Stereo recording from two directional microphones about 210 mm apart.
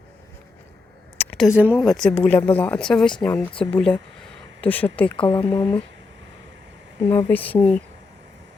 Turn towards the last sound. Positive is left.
turn(degrees=10)  # may be behind; listen again after turning